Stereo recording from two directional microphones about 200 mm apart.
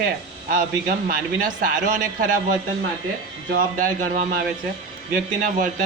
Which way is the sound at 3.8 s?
40° right (ahead or behind).